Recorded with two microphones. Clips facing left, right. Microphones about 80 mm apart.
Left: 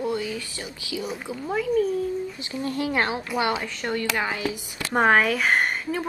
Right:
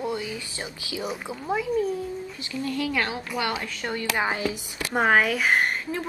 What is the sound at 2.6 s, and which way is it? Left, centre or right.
Speech, left.